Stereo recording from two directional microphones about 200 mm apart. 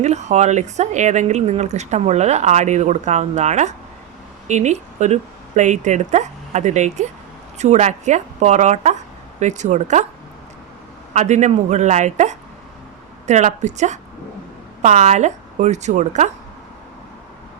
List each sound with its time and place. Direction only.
0.0 s speech: 35° right (ahead or behind)
11.1 s speech: 35° right (ahead or behind)